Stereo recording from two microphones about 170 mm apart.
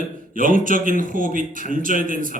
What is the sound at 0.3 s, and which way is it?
A man's voice, 55° right (ahead or behind).